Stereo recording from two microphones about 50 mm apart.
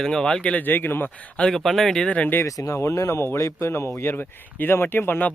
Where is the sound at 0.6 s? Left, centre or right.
Left.